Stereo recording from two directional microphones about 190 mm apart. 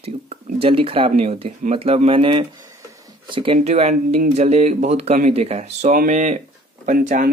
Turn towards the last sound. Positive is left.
turn(degrees=-40)  # may be behind; listen again after turning